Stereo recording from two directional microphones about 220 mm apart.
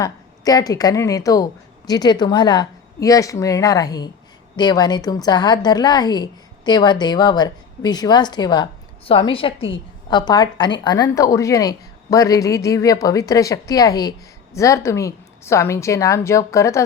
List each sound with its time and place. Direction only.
0.0 s a woman's voice: 15° left (ahead or behind)